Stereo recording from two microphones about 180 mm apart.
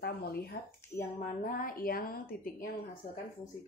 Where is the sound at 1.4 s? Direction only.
50° left (ahead or behind).